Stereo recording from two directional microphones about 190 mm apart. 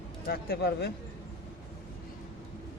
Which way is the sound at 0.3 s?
60° left (ahead or behind).